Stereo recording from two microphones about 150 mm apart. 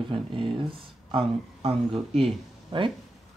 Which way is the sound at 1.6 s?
45° right (ahead or behind).